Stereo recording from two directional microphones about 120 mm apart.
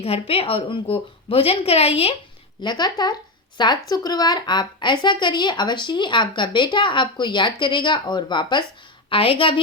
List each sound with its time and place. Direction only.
0.0 s a woman's voice: 55° left (ahead or behind)
2.6 s a woman's voice: 40° left (ahead or behind)
9.0 s a woman's voice: 50° left (ahead or behind)